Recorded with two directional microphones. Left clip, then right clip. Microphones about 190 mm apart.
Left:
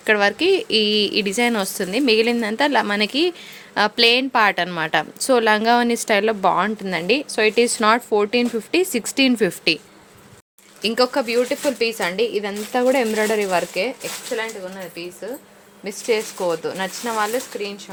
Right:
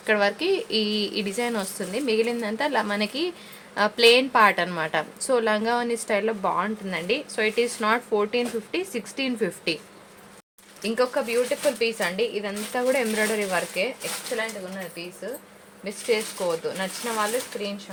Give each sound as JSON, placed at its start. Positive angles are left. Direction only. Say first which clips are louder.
{"t": 0.0, "sound": "a woman's voice", "louder": "left 5 dB", "side_deg": 45}
{"t": 10.8, "sound": "speech", "louder": "left 5 dB", "side_deg": 60}
{"t": 15.8, "sound": "speech", "louder": "left 4 dB", "side_deg": 55}